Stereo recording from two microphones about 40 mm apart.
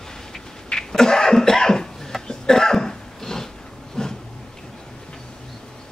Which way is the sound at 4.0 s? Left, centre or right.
Centre.